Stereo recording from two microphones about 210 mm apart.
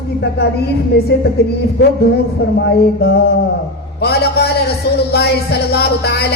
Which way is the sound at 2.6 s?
50° left (ahead or behind).